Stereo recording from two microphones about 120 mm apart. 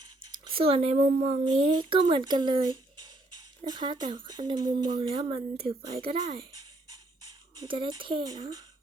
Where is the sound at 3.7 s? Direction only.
40° right (ahead or behind).